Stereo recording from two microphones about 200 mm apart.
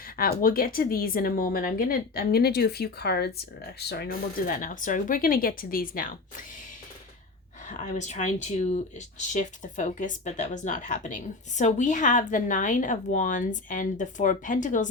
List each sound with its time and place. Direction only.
0.2 s speech: 45° left (ahead or behind)
7.7 s speech: 35° left (ahead or behind)